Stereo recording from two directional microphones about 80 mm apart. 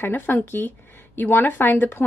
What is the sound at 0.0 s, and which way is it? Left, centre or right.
Speech, left.